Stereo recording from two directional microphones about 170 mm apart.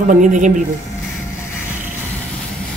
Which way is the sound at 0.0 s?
50° right (ahead or behind).